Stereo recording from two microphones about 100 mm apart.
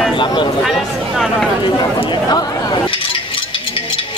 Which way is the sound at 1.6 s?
50° left (ahead or behind).